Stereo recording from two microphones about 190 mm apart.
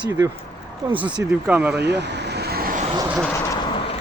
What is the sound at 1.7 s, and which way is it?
Vehicle, 65° right (ahead or behind).